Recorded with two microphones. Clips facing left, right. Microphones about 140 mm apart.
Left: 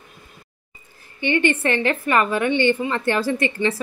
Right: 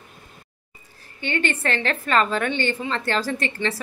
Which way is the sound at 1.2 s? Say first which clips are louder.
Left 5 dB; 15° left (ahead or behind).